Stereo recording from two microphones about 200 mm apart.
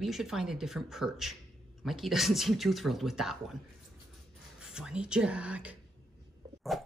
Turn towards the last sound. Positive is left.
turn(degrees=0)  # may be behind; listen again after turning